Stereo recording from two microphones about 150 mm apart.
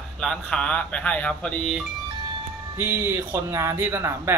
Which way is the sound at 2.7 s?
15° right (ahead or behind).